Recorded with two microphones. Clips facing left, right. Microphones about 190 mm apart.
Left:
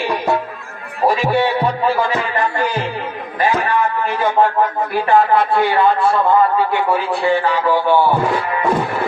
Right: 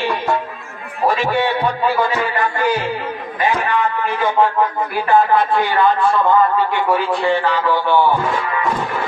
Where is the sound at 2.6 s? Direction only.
25° left (ahead or behind).